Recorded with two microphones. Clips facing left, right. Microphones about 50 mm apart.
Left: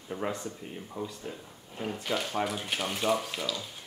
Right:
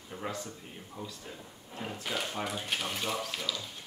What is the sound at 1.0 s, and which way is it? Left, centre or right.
Speech, centre.